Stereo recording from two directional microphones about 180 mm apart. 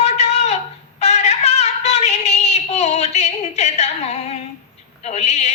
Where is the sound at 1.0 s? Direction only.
40° left (ahead or behind).